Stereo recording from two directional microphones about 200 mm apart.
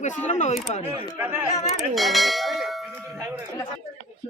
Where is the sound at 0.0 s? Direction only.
40° left (ahead or behind).